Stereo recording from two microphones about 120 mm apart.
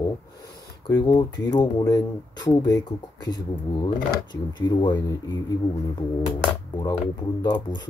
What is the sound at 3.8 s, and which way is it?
Speech, 35° left (ahead or behind).